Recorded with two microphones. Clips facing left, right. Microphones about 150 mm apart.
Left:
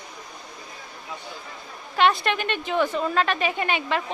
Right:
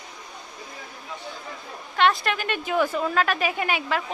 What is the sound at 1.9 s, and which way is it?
A woman's voice, centre (ahead or behind).